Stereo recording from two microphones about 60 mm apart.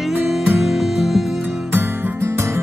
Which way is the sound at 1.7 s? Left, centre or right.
Right.